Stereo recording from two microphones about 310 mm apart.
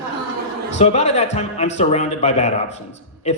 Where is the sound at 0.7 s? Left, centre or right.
Left.